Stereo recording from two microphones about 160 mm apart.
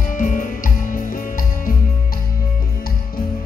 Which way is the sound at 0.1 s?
55° left (ahead or behind).